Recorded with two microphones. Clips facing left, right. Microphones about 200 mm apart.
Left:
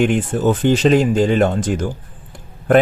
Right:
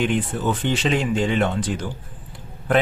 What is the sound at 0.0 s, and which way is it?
Speech, 45° left (ahead or behind).